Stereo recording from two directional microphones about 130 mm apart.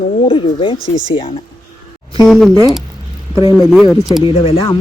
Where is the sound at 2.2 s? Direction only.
Centre (ahead or behind).